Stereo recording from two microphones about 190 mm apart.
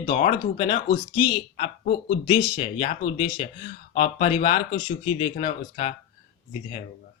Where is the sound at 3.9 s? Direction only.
45° left (ahead or behind).